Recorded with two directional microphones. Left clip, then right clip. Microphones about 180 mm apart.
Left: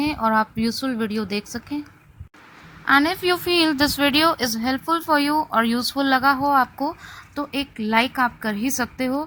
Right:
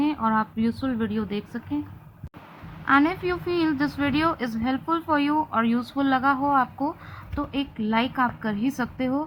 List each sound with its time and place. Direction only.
0.0 s a woman's voice: 50° left (ahead or behind)
2.8 s a woman's voice: 45° left (ahead or behind)